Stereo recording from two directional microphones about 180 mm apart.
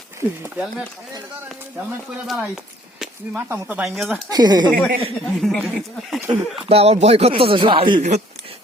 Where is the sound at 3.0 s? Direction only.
10° right (ahead or behind).